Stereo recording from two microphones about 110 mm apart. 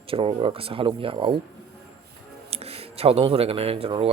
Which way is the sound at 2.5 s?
65° right (ahead or behind).